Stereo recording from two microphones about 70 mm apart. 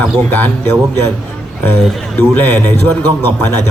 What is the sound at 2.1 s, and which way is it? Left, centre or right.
Speech, left.